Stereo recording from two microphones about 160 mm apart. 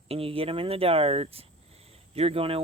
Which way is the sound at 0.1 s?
35° right (ahead or behind).